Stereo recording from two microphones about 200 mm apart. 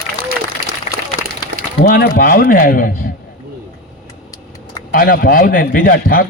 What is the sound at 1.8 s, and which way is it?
A man's voice, 50° left (ahead or behind).